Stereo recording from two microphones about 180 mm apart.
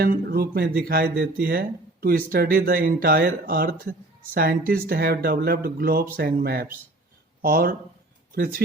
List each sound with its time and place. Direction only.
0.0 s speech: 55° right (ahead or behind)